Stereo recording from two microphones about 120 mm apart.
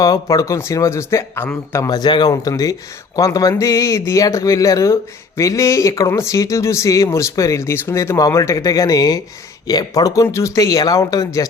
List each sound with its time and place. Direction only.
0.0 s speech: 30° left (ahead or behind)
1.9 s speech: 35° left (ahead or behind)